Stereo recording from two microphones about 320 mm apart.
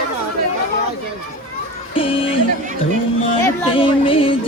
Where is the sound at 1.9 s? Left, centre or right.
Centre.